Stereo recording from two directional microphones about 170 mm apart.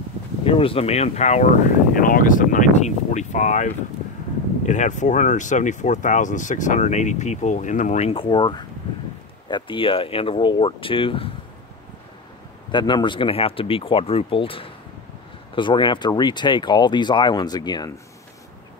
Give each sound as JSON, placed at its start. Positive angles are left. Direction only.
{"t": 0.5, "sound": "speech", "side_deg": 35}
{"t": 2.0, "sound": "speech", "side_deg": 55}
{"t": 12.7, "sound": "speech", "side_deg": 25}